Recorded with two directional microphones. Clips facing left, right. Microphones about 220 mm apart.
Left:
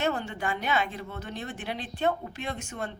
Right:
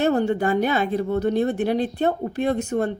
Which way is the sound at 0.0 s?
40° right (ahead or behind).